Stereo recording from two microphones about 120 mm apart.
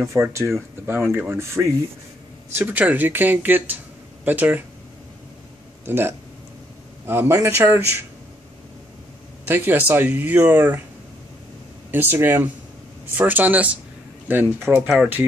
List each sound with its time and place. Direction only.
0.0 s speech: 20° right (ahead or behind)
5.9 s speech: 20° right (ahead or behind)
9.5 s speech: 15° right (ahead or behind)
11.9 s speech: 15° right (ahead or behind)